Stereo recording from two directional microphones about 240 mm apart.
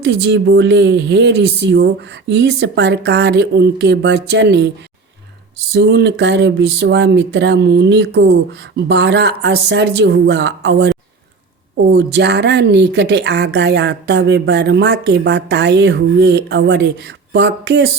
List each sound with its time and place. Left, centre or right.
0.0 s a woman's voice: right
11.9 s a woman's voice: right